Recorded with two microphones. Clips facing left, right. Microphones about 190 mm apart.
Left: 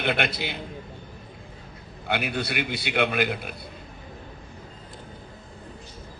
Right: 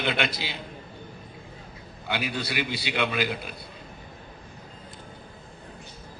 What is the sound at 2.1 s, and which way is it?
A man's voice, 55° left (ahead or behind).